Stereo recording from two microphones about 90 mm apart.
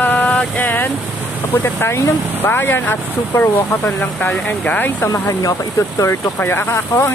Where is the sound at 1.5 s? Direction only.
25° left (ahead or behind).